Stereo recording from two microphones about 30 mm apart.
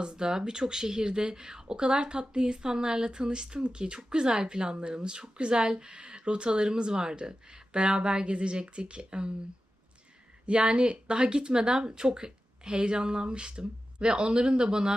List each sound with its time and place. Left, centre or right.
0.0 s a woman's voice: right
10.4 s speech: right